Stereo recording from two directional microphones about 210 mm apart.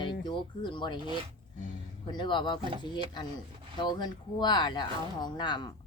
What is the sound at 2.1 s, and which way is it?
Speech, 20° left (ahead or behind).